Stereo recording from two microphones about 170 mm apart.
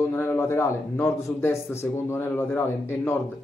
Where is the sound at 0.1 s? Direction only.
15° left (ahead or behind).